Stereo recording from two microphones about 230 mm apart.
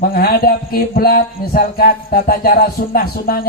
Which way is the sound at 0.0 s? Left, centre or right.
Left.